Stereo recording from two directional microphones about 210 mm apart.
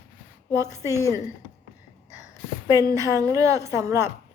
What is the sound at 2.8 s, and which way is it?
A woman's voice, 15° right (ahead or behind).